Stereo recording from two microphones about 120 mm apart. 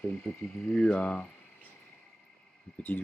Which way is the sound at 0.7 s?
5° left (ahead or behind).